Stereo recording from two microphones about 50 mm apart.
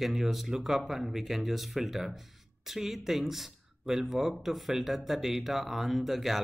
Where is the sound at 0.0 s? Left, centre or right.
Centre.